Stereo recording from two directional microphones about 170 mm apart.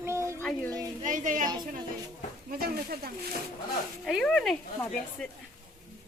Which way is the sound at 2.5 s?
65° right (ahead or behind).